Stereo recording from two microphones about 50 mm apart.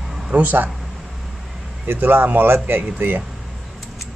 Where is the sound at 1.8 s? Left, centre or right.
Right.